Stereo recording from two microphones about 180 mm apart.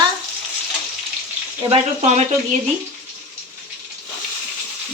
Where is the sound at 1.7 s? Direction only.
35° right (ahead or behind).